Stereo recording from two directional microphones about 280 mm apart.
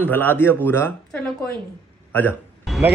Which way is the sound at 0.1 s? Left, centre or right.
Centre.